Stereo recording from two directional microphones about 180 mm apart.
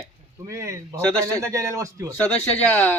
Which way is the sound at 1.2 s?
20° right (ahead or behind).